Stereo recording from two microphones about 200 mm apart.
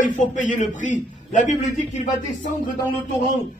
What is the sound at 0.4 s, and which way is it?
Speech, 40° left (ahead or behind).